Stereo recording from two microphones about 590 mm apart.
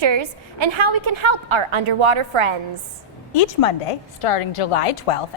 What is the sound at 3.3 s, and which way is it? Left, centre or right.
A woman's voice, left.